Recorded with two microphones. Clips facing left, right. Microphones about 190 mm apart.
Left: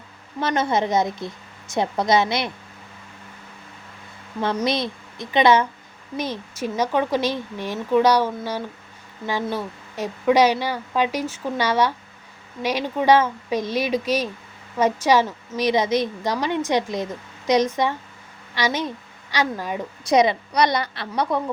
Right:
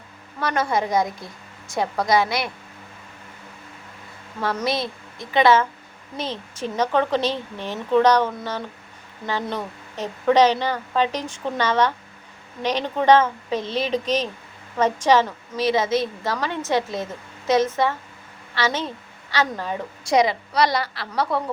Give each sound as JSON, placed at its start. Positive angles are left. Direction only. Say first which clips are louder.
{"t": 0.3, "sound": "a woman's voice", "louder": "left 1 dB", "side_deg": 20}
{"t": 4.6, "sound": "a woman's voice", "louder": "left 1 dB", "side_deg": 20}